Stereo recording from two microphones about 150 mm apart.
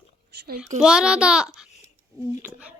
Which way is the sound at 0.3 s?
90° right.